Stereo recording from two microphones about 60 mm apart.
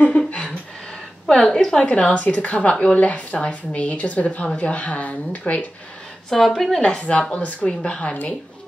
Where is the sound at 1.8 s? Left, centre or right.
Left.